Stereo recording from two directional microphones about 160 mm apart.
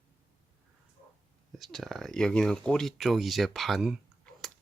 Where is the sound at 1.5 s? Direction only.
Centre (ahead or behind).